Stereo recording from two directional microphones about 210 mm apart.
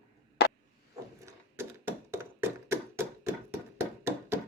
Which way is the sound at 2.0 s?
10° right (ahead or behind).